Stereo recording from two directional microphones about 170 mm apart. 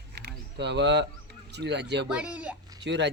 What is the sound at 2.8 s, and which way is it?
Speech, 90° right.